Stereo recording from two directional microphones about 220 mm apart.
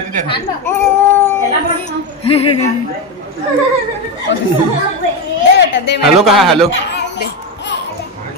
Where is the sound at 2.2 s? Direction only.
25° left (ahead or behind).